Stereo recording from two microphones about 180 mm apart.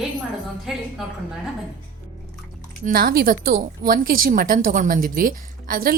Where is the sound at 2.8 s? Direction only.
55° right (ahead or behind).